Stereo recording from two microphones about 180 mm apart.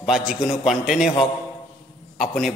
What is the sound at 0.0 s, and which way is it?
A man's voice, centre (ahead or behind).